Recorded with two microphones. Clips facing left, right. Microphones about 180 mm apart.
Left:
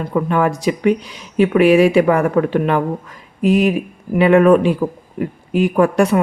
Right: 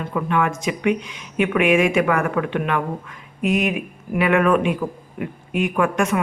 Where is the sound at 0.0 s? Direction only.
35° left (ahead or behind).